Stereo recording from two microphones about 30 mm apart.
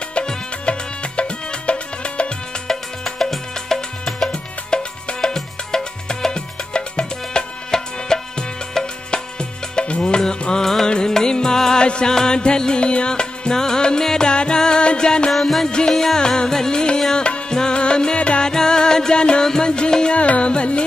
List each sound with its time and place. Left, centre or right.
0.7 s music: left
2.7 s music: centre
6.3 s music: left
7.7 s music: centre
11.8 s music: left
12.1 s music: centre
15.3 s music: centre
16.2 s music: left
16.4 s music: centre
17.1 s music: left
20.2 s music: left